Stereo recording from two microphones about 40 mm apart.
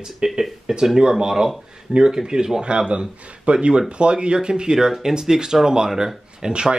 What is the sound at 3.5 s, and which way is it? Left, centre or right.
Speech, right.